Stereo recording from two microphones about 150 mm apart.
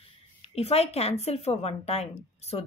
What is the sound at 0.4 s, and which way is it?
A woman's voice, 45° left (ahead or behind).